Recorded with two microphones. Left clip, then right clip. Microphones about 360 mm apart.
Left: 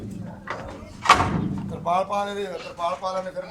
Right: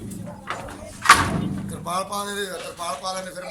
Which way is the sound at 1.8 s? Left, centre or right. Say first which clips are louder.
Left 4 dB; centre.